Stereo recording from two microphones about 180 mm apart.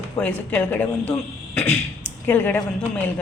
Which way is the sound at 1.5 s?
5° left (ahead or behind).